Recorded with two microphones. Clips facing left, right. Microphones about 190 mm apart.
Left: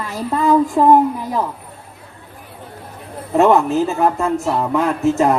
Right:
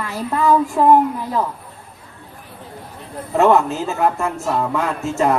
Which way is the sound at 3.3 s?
15° left (ahead or behind).